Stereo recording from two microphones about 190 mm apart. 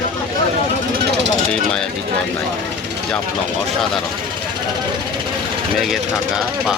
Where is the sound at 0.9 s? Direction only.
65° right (ahead or behind).